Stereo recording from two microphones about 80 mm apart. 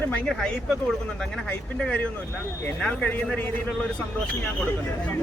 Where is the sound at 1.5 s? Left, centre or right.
Centre.